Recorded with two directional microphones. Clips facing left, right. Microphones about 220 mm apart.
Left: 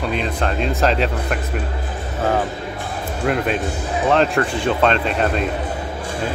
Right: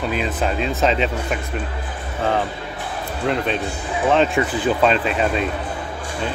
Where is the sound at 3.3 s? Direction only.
5° left (ahead or behind).